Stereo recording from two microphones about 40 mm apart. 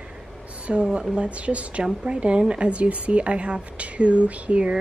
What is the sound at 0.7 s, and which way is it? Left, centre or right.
Speech, right.